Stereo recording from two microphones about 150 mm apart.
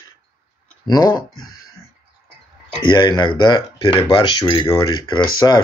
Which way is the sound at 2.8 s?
30° left (ahead or behind).